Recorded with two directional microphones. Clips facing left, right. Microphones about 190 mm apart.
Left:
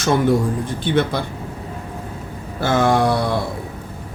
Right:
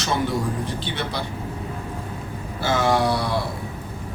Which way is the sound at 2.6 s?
50° left (ahead or behind).